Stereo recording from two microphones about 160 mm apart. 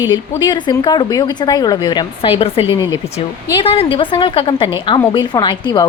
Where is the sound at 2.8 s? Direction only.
20° left (ahead or behind).